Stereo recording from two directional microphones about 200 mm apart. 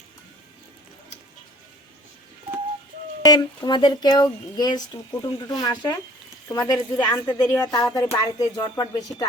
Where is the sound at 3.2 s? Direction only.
20° left (ahead or behind).